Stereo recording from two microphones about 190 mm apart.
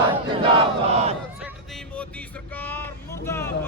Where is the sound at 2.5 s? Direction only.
10° left (ahead or behind).